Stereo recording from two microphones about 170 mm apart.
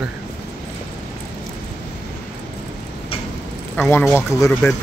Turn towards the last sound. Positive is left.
turn(degrees=15)  # may be behind; listen again after turning